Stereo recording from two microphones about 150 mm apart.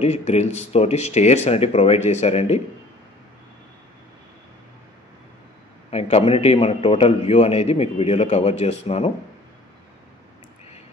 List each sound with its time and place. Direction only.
0.0 s a man's voice: 45° left (ahead or behind)
5.9 s a man's voice: 45° left (ahead or behind)